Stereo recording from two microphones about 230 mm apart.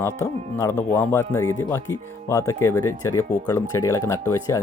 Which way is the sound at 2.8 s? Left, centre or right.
Left.